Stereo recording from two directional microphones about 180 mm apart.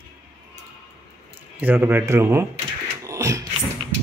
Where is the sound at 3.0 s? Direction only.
15° right (ahead or behind).